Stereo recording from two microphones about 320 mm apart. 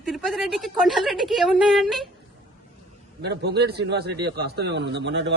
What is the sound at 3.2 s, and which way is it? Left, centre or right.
A man's voice, right.